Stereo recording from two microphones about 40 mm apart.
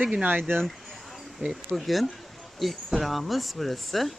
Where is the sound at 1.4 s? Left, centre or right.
Centre.